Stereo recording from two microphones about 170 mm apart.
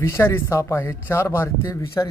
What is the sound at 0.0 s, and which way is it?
Speech, 15° left (ahead or behind).